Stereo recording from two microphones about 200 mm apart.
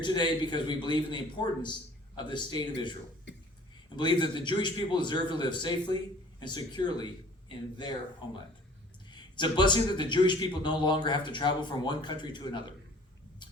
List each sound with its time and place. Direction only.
0.0 s a man's voice: 20° left (ahead or behind)
3.3 s a sound: 60° left (ahead or behind)
3.9 s a man's voice: 20° left (ahead or behind)